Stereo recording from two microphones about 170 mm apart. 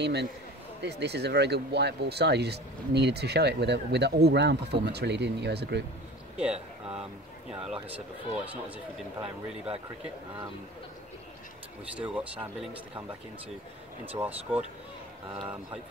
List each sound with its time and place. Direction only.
0.0 s speech: 80° right
6.3 s speech: 5° right (ahead or behind)
12.0 s speech: 5° right (ahead or behind)
14.1 s speech: 10° right (ahead or behind)